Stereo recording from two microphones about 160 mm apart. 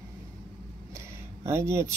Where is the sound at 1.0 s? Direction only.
15° right (ahead or behind).